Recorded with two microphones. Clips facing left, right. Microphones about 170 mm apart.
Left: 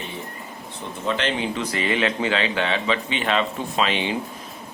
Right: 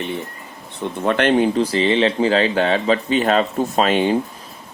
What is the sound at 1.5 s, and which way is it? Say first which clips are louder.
Speech: right 7 dB; 30° right (ahead or behind).